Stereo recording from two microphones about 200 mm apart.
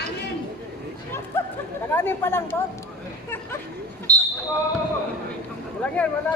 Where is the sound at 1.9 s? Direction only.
10° left (ahead or behind).